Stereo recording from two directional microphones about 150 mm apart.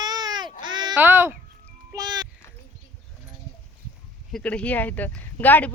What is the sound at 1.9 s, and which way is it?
Music, 30° right (ahead or behind).